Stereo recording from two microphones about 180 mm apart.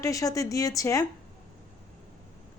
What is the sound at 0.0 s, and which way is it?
A woman's voice, 20° left (ahead or behind).